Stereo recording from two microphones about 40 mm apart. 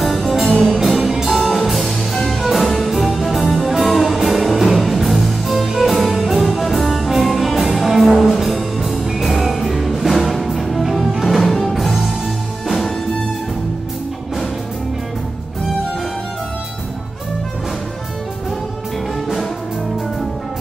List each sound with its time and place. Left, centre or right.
0.0 s music: centre